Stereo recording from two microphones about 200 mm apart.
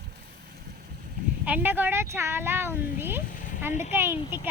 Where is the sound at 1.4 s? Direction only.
10° right (ahead or behind).